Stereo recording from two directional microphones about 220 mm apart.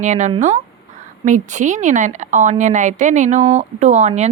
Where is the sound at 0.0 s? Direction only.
35° right (ahead or behind).